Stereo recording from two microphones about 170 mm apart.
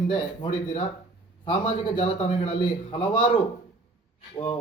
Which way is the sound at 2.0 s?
35° left (ahead or behind).